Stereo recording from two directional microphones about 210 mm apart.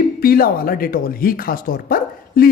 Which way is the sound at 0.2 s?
45° left (ahead or behind).